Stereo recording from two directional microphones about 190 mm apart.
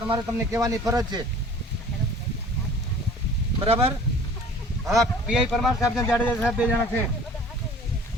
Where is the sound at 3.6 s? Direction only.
30° right (ahead or behind).